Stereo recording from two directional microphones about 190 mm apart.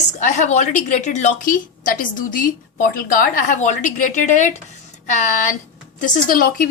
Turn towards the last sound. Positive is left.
turn(degrees=45)  # may be behind; listen again after turning